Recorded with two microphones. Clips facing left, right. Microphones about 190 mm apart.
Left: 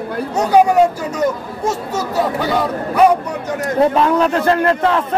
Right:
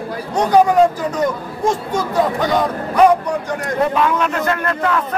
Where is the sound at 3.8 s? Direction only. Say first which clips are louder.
Left 4 dB; 30° left (ahead or behind).